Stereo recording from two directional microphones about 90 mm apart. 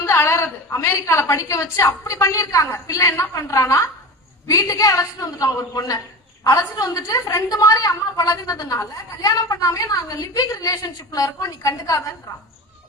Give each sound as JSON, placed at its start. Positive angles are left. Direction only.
{"t": 0.0, "sound": "a woman's voice", "side_deg": 30}